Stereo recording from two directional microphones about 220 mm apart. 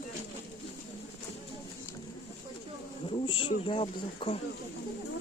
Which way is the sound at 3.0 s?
25° left (ahead or behind).